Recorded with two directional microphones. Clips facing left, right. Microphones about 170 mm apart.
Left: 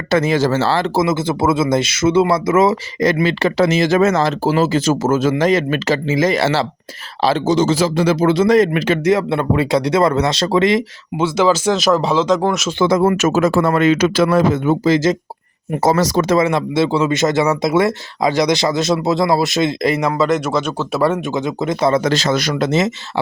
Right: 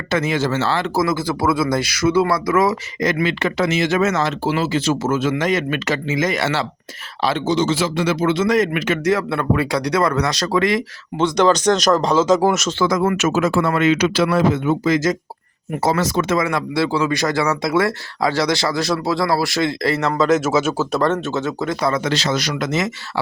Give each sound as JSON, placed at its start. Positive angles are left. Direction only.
{"t": 0.1, "sound": "speech", "side_deg": 35}
{"t": 11.2, "sound": "speech", "side_deg": 5}
{"t": 12.8, "sound": "speech", "side_deg": 30}
{"t": 14.9, "sound": "speech", "side_deg": 25}
{"t": 15.8, "sound": "speech", "side_deg": 40}
{"t": 16.5, "sound": "speech", "side_deg": 25}
{"t": 20.2, "sound": "speech", "side_deg": 0}
{"t": 21.0, "sound": "speech", "side_deg": 10}
{"t": 22.0, "sound": "a man's voice", "side_deg": 45}
{"t": 22.5, "sound": "speech", "side_deg": 30}